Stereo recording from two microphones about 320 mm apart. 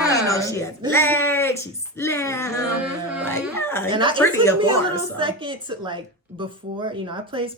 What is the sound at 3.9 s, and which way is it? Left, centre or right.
Speech, centre.